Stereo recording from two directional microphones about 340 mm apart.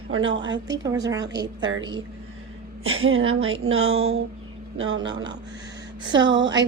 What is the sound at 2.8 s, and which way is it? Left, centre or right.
Speech, right.